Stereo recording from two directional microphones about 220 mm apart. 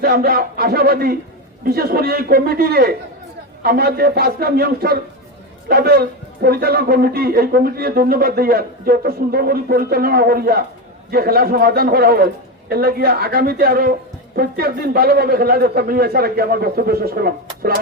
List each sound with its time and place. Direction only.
0.0 s a man's voice: 45° right (ahead or behind)